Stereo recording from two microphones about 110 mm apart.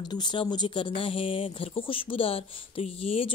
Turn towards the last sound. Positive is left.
turn(degrees=60)  # may be behind; listen again after turning